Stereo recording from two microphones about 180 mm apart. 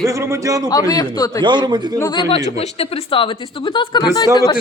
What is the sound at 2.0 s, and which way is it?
Speech, 25° left (ahead or behind).